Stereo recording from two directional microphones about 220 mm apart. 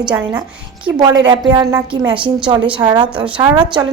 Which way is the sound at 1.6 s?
15° right (ahead or behind).